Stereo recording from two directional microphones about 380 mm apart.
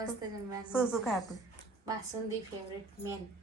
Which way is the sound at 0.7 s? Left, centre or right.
Centre.